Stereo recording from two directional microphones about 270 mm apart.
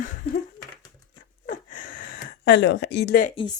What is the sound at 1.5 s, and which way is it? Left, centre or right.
Gasp, left.